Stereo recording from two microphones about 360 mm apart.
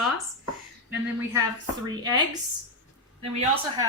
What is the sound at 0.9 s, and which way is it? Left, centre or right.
Speech, centre.